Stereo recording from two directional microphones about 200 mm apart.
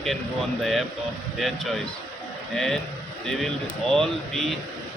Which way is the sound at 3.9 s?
Centre (ahead or behind).